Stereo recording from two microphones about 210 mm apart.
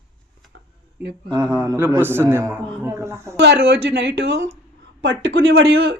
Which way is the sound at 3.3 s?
55° right (ahead or behind).